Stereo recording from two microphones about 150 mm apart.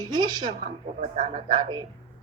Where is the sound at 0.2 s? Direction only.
30° right (ahead or behind).